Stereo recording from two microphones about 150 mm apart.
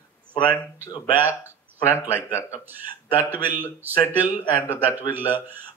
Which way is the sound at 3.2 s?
15° right (ahead or behind).